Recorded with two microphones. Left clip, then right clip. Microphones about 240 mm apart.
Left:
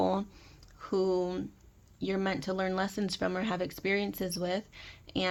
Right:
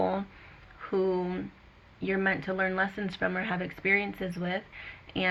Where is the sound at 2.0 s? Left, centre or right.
Left.